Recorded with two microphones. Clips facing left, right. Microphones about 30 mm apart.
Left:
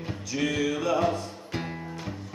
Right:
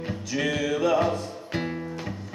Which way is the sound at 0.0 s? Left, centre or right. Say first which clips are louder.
Right 2 dB; centre.